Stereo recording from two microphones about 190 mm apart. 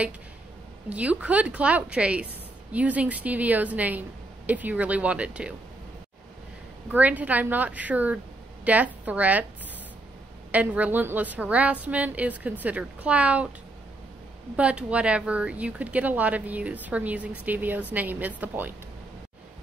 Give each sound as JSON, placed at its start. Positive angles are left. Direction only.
{"t": 0.8, "sound": "speech", "side_deg": -5}
{"t": 6.9, "sound": "speech", "side_deg": -10}
{"t": 10.5, "sound": "speech", "side_deg": -10}
{"t": 14.6, "sound": "speech", "side_deg": -5}